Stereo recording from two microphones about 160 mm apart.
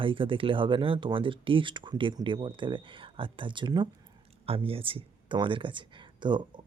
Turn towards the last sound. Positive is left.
turn(degrees=-30)  # may be behind; listen again after turning